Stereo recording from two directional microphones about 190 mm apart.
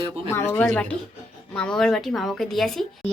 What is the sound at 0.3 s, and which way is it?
Speech, 15° left (ahead or behind).